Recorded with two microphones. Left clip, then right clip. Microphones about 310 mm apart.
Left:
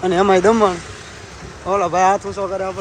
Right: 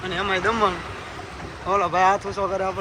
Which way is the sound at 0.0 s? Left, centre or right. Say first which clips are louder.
Left 9 dB; left.